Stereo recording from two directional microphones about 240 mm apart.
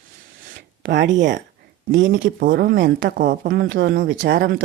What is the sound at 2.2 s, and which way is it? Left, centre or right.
Speech, right.